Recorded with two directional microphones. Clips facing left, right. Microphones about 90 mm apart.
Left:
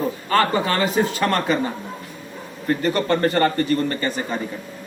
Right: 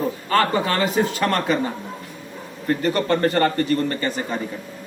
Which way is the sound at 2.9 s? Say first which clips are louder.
Even; 25° left (ahead or behind).